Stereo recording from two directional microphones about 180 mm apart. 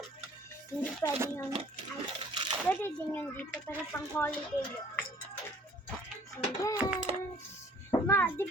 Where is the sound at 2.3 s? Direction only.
25° right (ahead or behind).